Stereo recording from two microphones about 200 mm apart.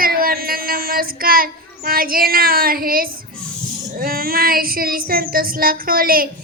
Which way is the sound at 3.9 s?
50° right (ahead or behind).